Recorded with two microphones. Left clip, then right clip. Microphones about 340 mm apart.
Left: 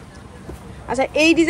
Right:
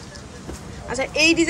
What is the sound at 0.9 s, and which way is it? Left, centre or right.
Speech, centre.